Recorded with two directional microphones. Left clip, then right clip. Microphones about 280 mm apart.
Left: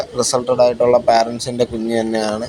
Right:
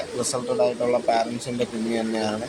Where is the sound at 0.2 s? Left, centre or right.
Centre.